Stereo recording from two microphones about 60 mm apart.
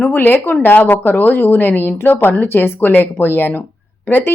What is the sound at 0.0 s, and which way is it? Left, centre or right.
A woman's voice, left.